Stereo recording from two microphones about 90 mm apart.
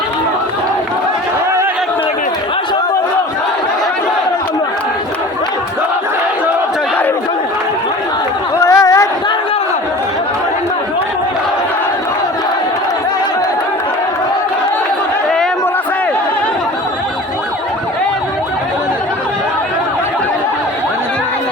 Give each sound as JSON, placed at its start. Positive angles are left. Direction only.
{"t": 8.5, "sound": "chatter", "side_deg": 35}